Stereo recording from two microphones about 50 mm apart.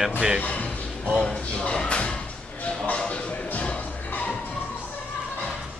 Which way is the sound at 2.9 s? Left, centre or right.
Left.